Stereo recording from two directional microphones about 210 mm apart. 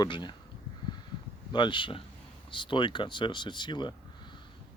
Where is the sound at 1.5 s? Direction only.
20° left (ahead or behind).